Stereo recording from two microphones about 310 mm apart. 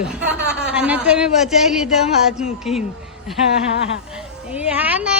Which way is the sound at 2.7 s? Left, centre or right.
Centre.